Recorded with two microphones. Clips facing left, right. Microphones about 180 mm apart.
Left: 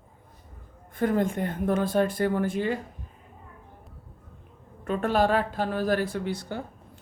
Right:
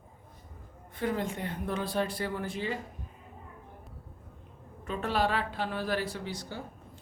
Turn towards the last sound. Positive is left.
turn(degrees=60)  # may be behind; listen again after turning